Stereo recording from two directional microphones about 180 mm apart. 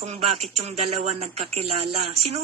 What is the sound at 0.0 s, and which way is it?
A woman's voice, 40° right (ahead or behind).